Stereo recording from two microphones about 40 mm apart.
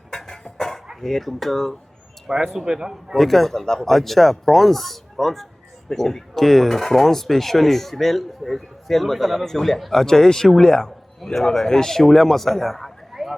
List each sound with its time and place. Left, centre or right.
0.1 s dog: centre
1.0 s speech: centre
2.3 s a man's voice: centre
3.2 s a man's voice: centre